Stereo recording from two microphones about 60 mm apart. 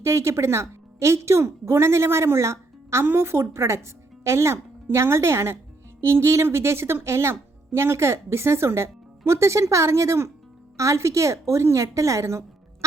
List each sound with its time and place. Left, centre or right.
0.0 s a woman's voice: right